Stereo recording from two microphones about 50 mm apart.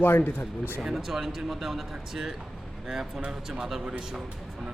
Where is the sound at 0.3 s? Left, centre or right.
Left.